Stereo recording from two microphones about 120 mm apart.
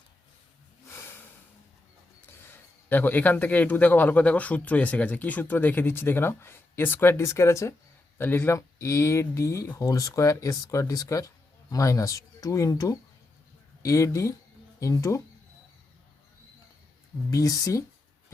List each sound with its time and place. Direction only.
2.4 s a man's voice: 15° left (ahead or behind)
17.3 s speech: 30° left (ahead or behind)